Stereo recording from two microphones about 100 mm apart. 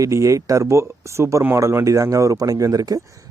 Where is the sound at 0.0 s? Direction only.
30° right (ahead or behind).